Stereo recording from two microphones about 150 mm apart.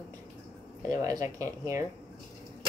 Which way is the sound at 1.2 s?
20° right (ahead or behind).